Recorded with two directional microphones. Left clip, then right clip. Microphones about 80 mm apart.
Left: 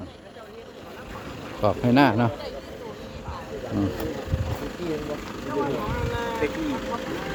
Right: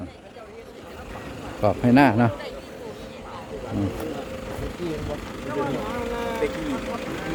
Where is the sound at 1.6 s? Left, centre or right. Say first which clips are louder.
Right 2 dB; right.